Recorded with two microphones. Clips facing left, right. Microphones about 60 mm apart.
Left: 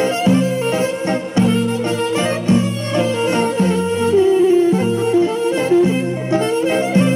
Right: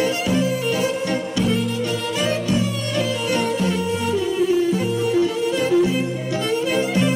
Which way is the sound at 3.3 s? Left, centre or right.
Left.